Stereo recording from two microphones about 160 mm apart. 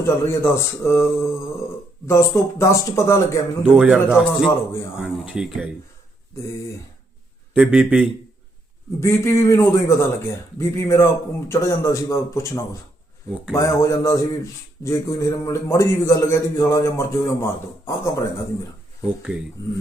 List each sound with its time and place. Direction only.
0.0 s speech: 15° left (ahead or behind)
3.8 s speech: 5° right (ahead or behind)
7.5 s speech: 5° right (ahead or behind)
9.0 s speech: 15° left (ahead or behind)
13.5 s a sound: 20° left (ahead or behind)
14.8 s speech: 20° left (ahead or behind)